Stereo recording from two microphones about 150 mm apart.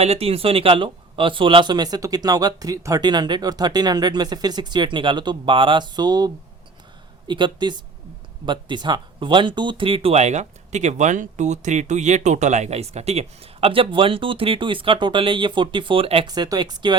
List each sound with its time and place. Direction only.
0.0 s speech: 40° right (ahead or behind)
16.2 s speech: 25° right (ahead or behind)